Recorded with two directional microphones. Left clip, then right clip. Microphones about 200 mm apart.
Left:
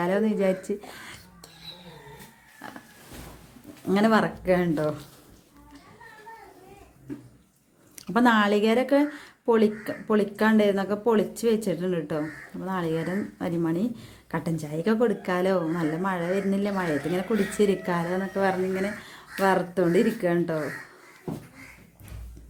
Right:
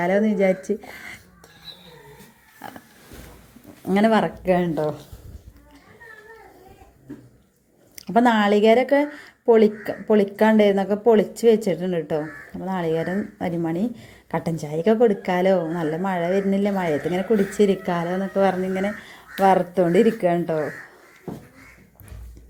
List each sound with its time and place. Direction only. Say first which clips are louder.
0.0 s speech: right 5 dB; 5° right (ahead or behind)
3.8 s speech: right 3 dB; 10° right (ahead or behind)
8.0 s speech: right 3 dB; 5° right (ahead or behind)